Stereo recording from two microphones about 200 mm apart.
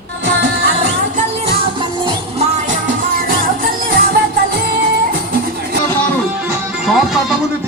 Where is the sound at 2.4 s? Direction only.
40° right (ahead or behind).